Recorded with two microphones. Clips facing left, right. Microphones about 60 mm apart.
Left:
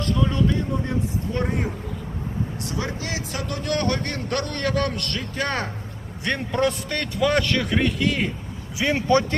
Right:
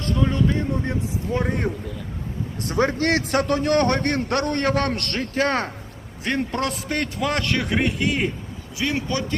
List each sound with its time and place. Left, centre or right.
0.0 s speech: right
1.3 s a man's voice: centre
2.6 s a man's voice: right
3.0 s a man's voice: right
3.5 s a man's voice: right
6.2 s a man's voice: centre
7.5 s speech: centre
8.8 s a man's voice: left